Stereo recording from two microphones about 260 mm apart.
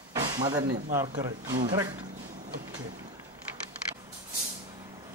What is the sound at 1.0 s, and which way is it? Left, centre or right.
Speech, centre.